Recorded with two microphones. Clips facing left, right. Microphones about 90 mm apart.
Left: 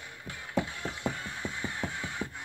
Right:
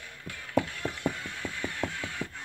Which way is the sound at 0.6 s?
20° left (ahead or behind).